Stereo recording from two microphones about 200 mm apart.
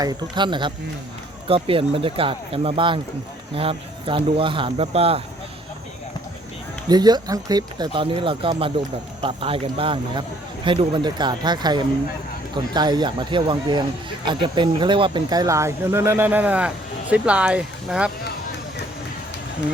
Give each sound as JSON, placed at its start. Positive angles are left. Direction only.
{"t": 0.0, "sound": "a man's voice", "side_deg": -20}
{"t": 6.8, "sound": "a man's voice", "side_deg": -20}